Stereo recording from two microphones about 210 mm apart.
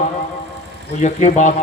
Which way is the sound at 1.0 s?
35° left (ahead or behind).